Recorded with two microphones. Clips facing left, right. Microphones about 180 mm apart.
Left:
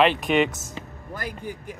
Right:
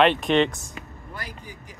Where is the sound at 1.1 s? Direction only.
50° left (ahead or behind).